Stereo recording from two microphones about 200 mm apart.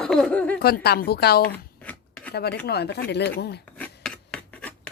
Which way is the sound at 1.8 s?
10° left (ahead or behind).